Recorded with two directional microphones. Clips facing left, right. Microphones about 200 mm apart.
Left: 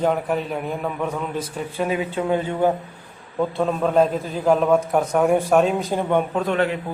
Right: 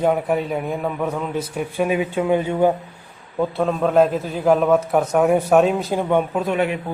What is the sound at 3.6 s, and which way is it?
A man's voice, centre (ahead or behind).